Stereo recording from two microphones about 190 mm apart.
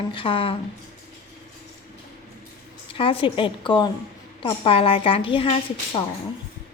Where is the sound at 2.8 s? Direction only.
30° left (ahead or behind).